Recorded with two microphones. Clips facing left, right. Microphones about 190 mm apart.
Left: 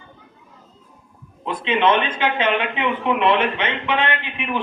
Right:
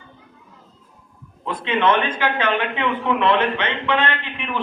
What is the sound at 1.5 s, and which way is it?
A man's voice, 20° left (ahead or behind).